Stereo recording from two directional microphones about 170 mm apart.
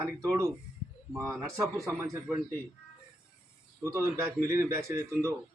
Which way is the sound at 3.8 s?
15° right (ahead or behind).